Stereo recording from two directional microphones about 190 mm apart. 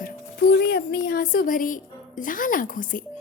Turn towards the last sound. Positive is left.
turn(degrees=45)  # may be behind; listen again after turning